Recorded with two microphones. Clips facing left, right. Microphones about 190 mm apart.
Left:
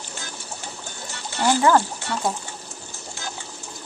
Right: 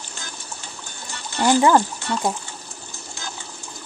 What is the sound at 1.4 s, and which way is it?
Speech, 15° right (ahead or behind).